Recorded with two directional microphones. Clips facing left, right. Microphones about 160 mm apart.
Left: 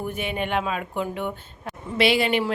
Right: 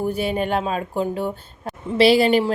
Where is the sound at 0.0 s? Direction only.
35° right (ahead or behind).